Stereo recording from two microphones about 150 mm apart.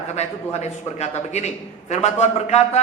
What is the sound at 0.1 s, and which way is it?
A man's voice, 50° left (ahead or behind).